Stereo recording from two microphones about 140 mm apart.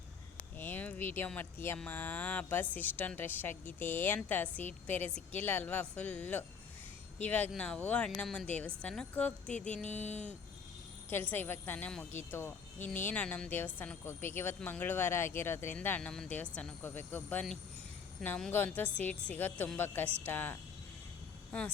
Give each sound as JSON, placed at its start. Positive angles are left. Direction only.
{"t": 0.6, "sound": "speech", "side_deg": 10}
{"t": 9.9, "sound": "a sound", "side_deg": 55}
{"t": 11.1, "sound": "speech", "side_deg": 15}